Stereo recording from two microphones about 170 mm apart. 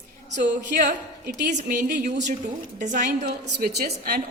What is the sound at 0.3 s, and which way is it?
Speech, 45° right (ahead or behind).